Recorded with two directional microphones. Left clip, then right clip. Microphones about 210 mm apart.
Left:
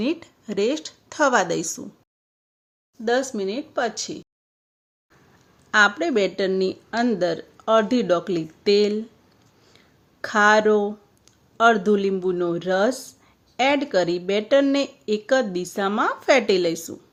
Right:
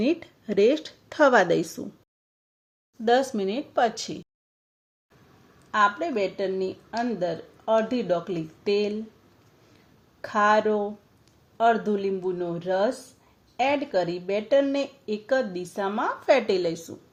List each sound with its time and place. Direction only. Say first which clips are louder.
0.0 s speech: even; 5° right (ahead or behind)
3.0 s speech: even; centre (ahead or behind)
5.7 s speech: left 5 dB; 35° left (ahead or behind)
10.2 s speech: left 4 dB; 30° left (ahead or behind)